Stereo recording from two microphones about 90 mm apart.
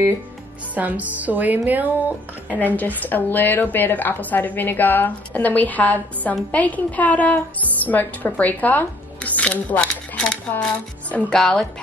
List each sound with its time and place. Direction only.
0.7 s speech: 15° right (ahead or behind)
2.5 s a woman's voice: 20° left (ahead or behind)